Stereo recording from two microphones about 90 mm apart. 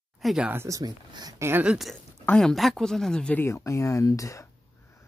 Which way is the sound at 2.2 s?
5° left (ahead or behind).